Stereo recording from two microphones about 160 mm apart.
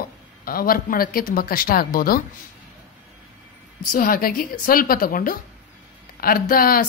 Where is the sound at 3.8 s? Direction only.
60° left (ahead or behind).